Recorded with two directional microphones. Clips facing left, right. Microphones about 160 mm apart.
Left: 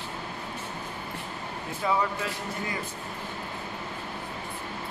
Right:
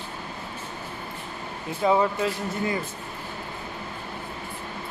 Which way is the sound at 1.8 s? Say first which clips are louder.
Right 6 dB; 25° right (ahead or behind).